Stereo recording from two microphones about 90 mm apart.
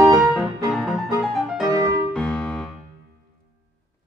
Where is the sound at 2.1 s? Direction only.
10° left (ahead or behind).